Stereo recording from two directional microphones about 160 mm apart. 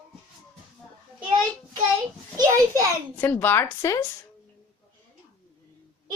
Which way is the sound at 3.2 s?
15° left (ahead or behind).